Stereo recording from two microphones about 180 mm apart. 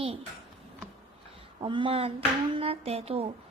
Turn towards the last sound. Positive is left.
turn(degrees=-35)  # may be behind; listen again after turning